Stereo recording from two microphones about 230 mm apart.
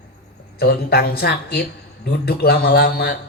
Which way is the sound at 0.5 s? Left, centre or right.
Left.